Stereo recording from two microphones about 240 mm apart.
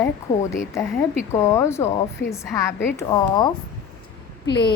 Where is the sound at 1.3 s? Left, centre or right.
Centre.